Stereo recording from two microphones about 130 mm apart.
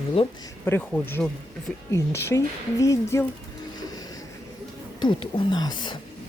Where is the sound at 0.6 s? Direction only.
15° left (ahead or behind).